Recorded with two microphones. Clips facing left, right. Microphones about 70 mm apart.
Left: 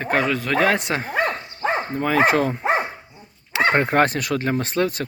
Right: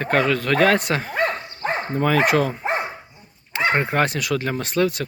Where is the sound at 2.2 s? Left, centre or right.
Left.